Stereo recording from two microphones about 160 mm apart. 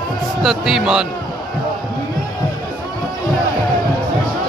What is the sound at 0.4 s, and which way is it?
Speech, 5° right (ahead or behind).